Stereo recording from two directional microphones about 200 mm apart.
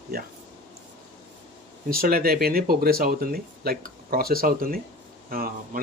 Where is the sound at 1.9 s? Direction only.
50° right (ahead or behind).